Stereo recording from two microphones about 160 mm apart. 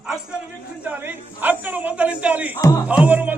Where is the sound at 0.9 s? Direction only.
10° right (ahead or behind).